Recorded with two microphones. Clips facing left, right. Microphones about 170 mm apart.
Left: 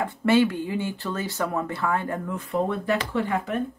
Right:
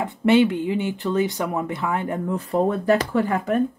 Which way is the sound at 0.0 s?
20° right (ahead or behind).